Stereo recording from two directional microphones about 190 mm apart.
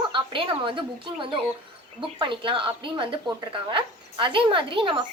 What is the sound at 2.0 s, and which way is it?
Speech, 25° right (ahead or behind).